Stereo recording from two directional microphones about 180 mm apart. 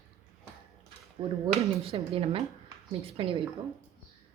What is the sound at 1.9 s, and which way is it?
Speech, 30° right (ahead or behind).